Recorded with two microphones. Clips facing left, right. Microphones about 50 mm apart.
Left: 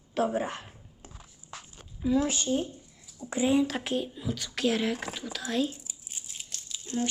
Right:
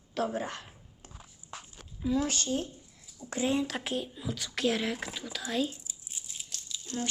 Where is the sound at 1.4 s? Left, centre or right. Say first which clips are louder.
Even; centre.